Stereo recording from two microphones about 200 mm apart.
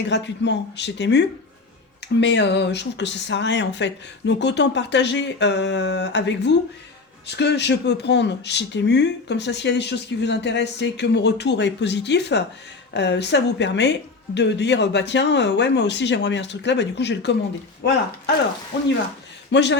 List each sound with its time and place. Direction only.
0.0 s speech: 60° left (ahead or behind)
2.2 s speech: 60° left (ahead or behind)
19.5 s speech: 60° left (ahead or behind)